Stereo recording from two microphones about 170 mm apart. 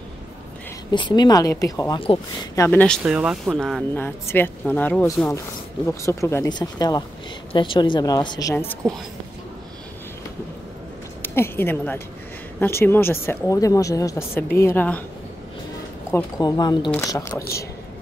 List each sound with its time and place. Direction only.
0.9 s a woman's voice: 25° left (ahead or behind)
2.5 s speech: 15° left (ahead or behind)
3.0 s a woman's voice: 5° right (ahead or behind); by 8.7 s 20° left (ahead or behind)
11.2 s speech: 15° left (ahead or behind)
16.1 s a woman's voice: 20° left (ahead or behind)